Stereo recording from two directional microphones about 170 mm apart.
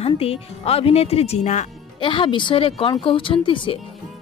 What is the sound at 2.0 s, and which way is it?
Speech, 30° left (ahead or behind).